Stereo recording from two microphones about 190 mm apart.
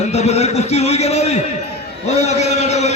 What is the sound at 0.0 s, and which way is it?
A man's voice, 35° left (ahead or behind).